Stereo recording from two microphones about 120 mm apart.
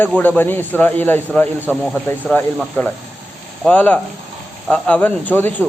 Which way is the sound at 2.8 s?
15° left (ahead or behind).